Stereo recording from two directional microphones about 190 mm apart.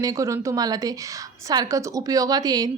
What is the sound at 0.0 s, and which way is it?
A woman's voice, 15° right (ahead or behind).